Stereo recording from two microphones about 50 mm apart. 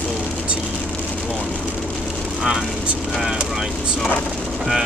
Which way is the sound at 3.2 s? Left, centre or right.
Centre.